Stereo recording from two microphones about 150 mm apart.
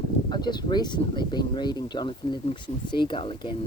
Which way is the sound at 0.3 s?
30° left (ahead or behind).